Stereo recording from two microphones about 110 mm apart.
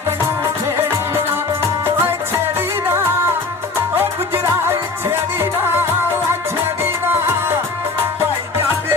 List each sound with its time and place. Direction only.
1.8 s music: 20° right (ahead or behind)
4.4 s music: 25° right (ahead or behind)